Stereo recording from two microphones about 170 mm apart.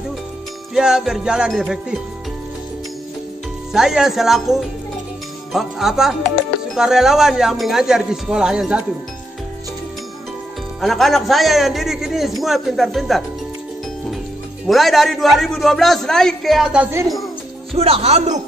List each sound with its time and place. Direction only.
0.7 s a man's voice: 5° right (ahead or behind)
3.7 s a man's voice: 5° right (ahead or behind)
10.8 s a man's voice: centre (ahead or behind)
14.7 s a man's voice: centre (ahead or behind)
17.7 s speech: 35° right (ahead or behind)